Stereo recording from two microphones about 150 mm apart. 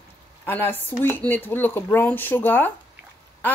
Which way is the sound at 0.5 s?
15° left (ahead or behind).